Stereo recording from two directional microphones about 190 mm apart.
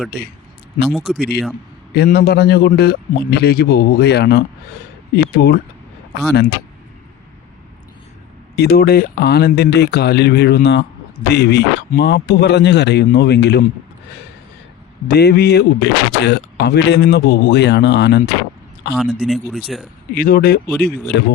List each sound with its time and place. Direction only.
0.9 s speech: centre (ahead or behind)
1.1 s speech: 60° left (ahead or behind)
8.5 s speech: 55° left (ahead or behind)
15.0 s speech: 55° left (ahead or behind)
19.2 s speech: centre (ahead or behind)
20.1 s speech: 50° left (ahead or behind)